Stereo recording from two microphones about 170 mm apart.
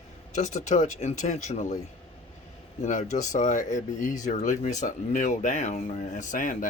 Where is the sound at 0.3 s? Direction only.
45° left (ahead or behind).